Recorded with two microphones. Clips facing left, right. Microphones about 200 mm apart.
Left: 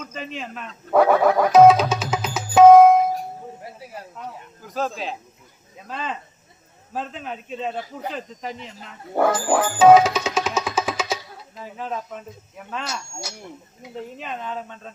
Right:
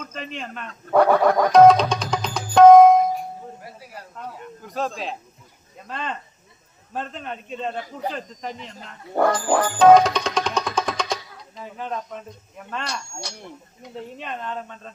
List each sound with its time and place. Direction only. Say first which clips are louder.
0.0 s a sound: left 1 dB; centre (ahead or behind)
0.9 s music: even; 5° left (ahead or behind)
3.6 s snake: left 3 dB; 25° left (ahead or behind)
4.3 s a man's voice: right 2 dB; centre (ahead or behind)